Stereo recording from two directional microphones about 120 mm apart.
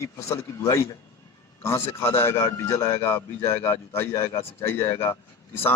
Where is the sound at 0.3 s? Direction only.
25° left (ahead or behind).